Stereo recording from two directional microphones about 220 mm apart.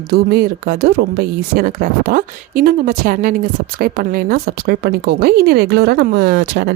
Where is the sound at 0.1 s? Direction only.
45° right (ahead or behind).